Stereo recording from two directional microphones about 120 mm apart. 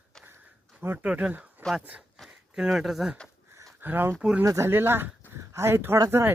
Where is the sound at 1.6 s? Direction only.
5° left (ahead or behind).